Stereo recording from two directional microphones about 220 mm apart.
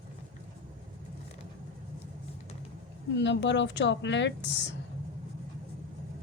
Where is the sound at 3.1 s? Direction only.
55° left (ahead or behind).